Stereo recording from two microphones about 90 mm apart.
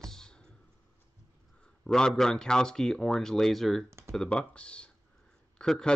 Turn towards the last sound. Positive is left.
turn(degrees=5)  # may be behind; listen again after turning